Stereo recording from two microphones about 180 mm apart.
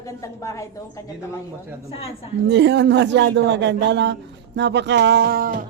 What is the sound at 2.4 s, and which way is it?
A man's voice, 75° right (ahead or behind).